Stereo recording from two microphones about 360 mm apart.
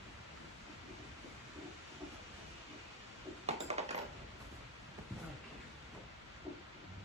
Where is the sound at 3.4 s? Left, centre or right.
Centre.